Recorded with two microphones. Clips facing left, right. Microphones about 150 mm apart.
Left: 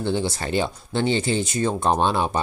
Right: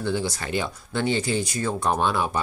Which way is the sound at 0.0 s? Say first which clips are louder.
Left 2 dB; 25° left (ahead or behind).